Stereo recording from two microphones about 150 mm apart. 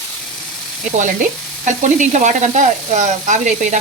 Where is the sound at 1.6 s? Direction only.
55° right (ahead or behind).